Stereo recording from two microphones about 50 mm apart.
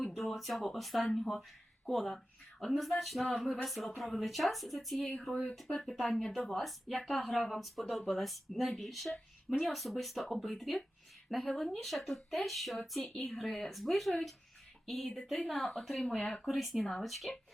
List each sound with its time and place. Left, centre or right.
0.0 s speech: centre
6.1 s speech: centre
6.3 s speech: centre
16.2 s speech: left
16.5 s speech: centre